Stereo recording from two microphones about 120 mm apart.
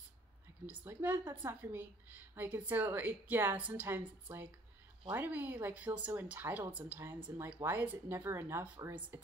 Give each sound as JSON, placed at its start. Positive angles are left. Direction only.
{"t": 0.7, "sound": "a woman's voice", "side_deg": -15}